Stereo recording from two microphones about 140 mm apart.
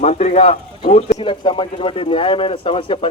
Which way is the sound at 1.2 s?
35° left (ahead or behind).